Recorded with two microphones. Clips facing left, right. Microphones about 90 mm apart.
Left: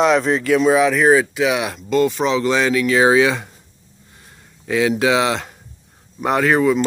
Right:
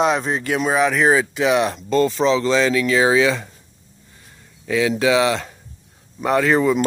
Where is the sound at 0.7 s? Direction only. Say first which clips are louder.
Left 3 dB; centre (ahead or behind).